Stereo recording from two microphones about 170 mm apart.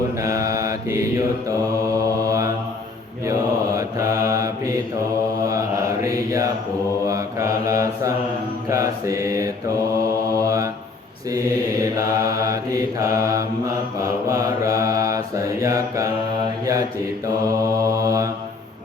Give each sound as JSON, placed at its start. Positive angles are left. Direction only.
{"t": 0.2, "sound": "mantra", "side_deg": -20}
{"t": 17.4, "sound": "mantra", "side_deg": -20}